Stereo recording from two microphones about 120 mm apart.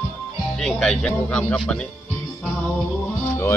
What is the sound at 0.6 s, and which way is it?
Speech, 5° left (ahead or behind).